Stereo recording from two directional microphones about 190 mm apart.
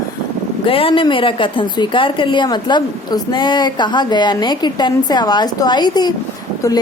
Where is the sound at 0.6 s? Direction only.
30° left (ahead or behind).